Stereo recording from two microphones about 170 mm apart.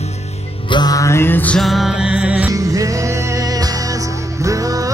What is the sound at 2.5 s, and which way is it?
Music, 20° right (ahead or behind).